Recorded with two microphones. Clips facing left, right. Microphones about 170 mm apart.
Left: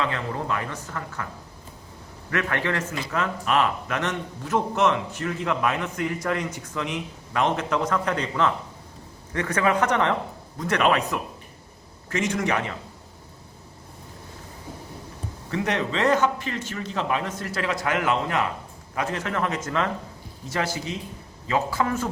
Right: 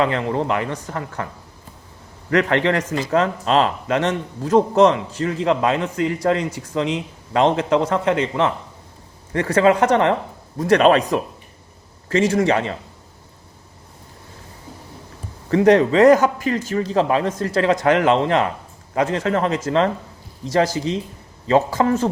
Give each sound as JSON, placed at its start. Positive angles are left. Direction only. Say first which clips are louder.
{"t": 0.0, "sound": "a man's voice", "louder": "right 8 dB", "side_deg": -25}
{"t": 2.3, "sound": "speech", "louder": "right 8 dB", "side_deg": -25}
{"t": 3.1, "sound": "speech", "louder": "right 7 dB", "side_deg": -35}
{"t": 15.4, "sound": "a man's voice", "louder": "right 12 dB", "side_deg": -35}